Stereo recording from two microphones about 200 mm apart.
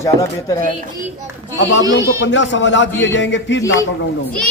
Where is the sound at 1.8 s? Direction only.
15° right (ahead or behind).